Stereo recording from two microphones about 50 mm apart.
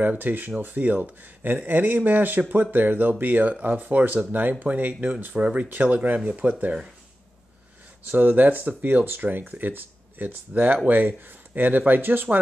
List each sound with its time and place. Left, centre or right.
0.0 s speech: right
8.1 s speech: right